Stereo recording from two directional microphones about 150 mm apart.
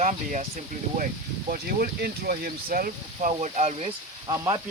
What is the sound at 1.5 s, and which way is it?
Speech, 85° right.